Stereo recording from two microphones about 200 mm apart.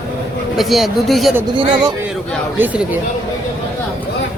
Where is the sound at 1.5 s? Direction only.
25° right (ahead or behind).